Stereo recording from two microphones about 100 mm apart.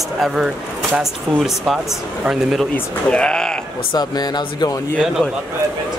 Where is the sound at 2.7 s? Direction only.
10° left (ahead or behind).